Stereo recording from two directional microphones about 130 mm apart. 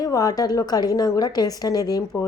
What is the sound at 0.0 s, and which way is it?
A woman's voice, 30° left (ahead or behind).